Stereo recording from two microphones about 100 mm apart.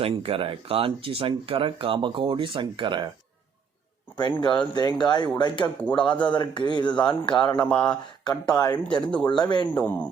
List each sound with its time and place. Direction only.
0.0 s speech: 70° right (ahead or behind); by 3.1 s 50° right (ahead or behind)
4.2 s speech: 50° left (ahead or behind)
6.9 s a man's voice: 10° left (ahead or behind)
7.4 s speech: 45° left (ahead or behind)
7.7 s a man's voice: 10° left (ahead or behind)
8.2 s speech: 45° left (ahead or behind)
9.0 s a man's voice: 10° left (ahead or behind)
9.4 s speech: 45° left (ahead or behind)
9.6 s a man's voice: 15° left (ahead or behind)